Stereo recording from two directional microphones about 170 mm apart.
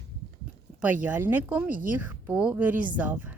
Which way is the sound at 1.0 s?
10° right (ahead or behind).